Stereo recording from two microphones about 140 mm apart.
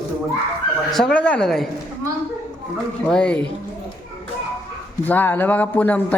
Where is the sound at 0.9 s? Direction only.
5° left (ahead or behind).